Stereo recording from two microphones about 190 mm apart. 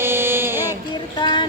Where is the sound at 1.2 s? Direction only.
25° left (ahead or behind).